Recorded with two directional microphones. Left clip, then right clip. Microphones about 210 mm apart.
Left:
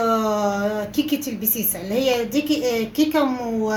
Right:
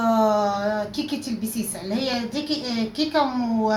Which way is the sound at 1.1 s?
Centre (ahead or behind).